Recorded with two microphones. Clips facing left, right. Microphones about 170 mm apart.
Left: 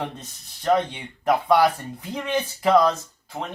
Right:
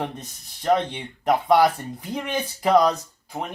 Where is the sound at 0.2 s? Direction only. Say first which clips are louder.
Right 3 dB; 15° right (ahead or behind).